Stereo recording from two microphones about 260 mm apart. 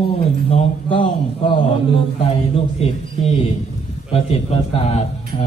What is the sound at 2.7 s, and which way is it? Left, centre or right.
A man's voice, left.